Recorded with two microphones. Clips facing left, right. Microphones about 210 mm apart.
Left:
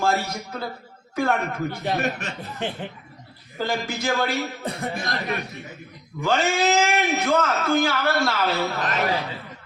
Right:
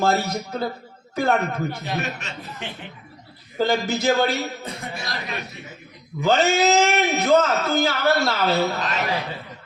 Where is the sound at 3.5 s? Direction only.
25° right (ahead or behind).